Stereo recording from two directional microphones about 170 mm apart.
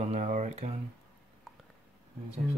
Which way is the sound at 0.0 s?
45° right (ahead or behind).